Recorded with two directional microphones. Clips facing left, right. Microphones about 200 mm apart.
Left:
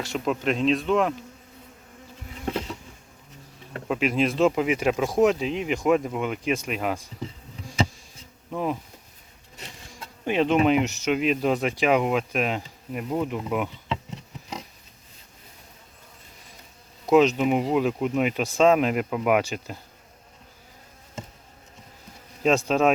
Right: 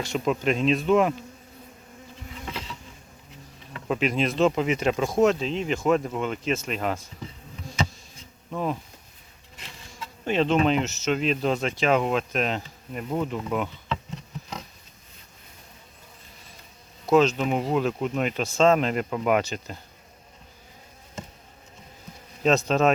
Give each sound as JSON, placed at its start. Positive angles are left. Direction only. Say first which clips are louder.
{"t": 0.0, "sound": "speech", "louder": "right 1 dB", "side_deg": 0}
{"t": 2.4, "sound": "insect", "louder": "left 8 dB", "side_deg": 50}
{"t": 3.8, "sound": "speech", "louder": "left 1 dB", "side_deg": 5}
{"t": 8.4, "sound": "speech", "louder": "left 1 dB", "side_deg": 10}
{"t": 10.2, "sound": "speech", "louder": "left 1 dB", "side_deg": 10}
{"t": 17.1, "sound": "speech", "louder": "left 2 dB", "side_deg": 15}
{"t": 22.4, "sound": "speech", "louder": "even", "side_deg": 10}